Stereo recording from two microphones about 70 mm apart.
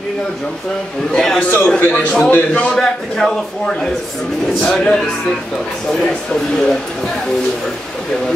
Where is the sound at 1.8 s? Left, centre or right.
Left.